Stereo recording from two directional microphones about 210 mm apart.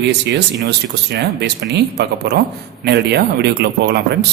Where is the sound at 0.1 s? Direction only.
55° right (ahead or behind).